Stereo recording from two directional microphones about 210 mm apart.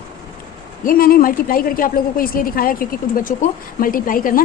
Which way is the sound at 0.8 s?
45° left (ahead or behind).